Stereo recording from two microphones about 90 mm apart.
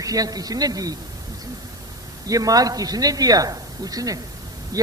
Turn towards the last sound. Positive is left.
turn(degrees=-40)  # may be behind; listen again after turning